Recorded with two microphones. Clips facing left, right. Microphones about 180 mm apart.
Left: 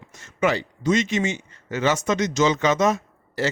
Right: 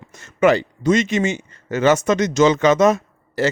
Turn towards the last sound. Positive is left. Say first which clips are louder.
# right 5 dB
turn(degrees=-55)  # may be behind; listen again after turning